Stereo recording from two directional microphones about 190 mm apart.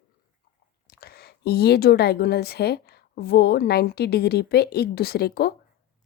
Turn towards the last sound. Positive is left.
turn(degrees=55)  # may be behind; listen again after turning